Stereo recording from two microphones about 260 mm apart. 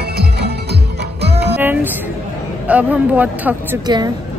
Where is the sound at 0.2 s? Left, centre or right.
Right.